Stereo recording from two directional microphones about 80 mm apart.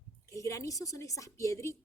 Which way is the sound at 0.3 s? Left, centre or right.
Left.